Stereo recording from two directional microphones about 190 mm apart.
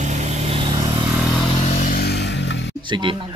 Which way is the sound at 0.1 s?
35° right (ahead or behind).